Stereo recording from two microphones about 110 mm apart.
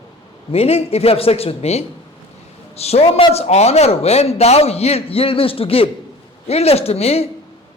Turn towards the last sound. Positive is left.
turn(degrees=65)  # may be behind; listen again after turning